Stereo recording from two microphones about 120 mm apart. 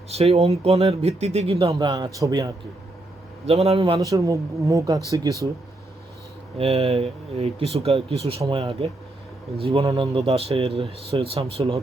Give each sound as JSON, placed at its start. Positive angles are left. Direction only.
{"t": 0.1, "sound": "speech", "side_deg": -60}
{"t": 1.7, "sound": "speech", "side_deg": -35}
{"t": 3.4, "sound": "speech", "side_deg": -60}
{"t": 4.0, "sound": "speech", "side_deg": -25}
{"t": 6.6, "sound": "speech", "side_deg": -60}
{"t": 8.4, "sound": "speech", "side_deg": -50}
{"t": 9.8, "sound": "speech", "side_deg": -30}
{"t": 10.2, "sound": "speech", "side_deg": -60}